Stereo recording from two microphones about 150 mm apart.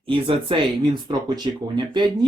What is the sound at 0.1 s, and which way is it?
Speech, 35° right (ahead or behind).